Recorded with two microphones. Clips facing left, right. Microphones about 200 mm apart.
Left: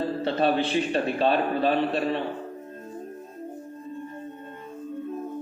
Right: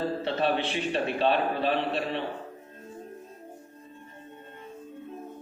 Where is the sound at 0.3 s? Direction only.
40° left (ahead or behind).